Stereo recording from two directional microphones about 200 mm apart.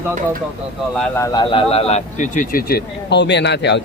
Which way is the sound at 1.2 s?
20° left (ahead or behind).